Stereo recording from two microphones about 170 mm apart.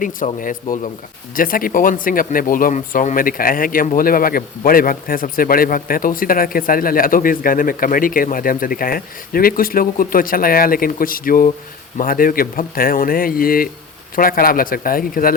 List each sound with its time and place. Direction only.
0.3 s speech: 50° left (ahead or behind)